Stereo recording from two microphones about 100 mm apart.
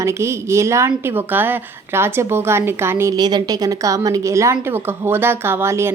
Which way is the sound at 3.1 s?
45° right (ahead or behind).